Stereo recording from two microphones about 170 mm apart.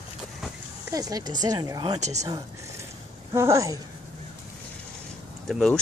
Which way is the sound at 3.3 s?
15° right (ahead or behind).